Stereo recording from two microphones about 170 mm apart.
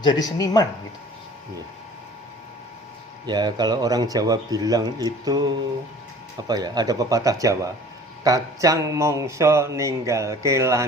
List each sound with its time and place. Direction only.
0.0 s speech: 25° left (ahead or behind)
3.2 s speech: 25° right (ahead or behind)